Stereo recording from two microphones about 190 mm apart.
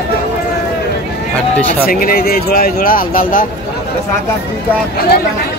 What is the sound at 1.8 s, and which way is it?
Speech, 50° left (ahead or behind).